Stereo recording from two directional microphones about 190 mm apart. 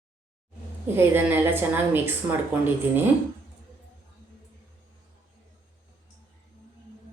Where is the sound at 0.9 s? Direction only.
10° right (ahead or behind).